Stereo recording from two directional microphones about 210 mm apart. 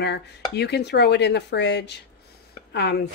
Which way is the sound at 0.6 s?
50° left (ahead or behind).